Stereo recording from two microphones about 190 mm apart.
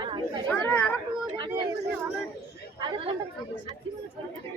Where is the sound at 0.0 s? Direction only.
25° right (ahead or behind).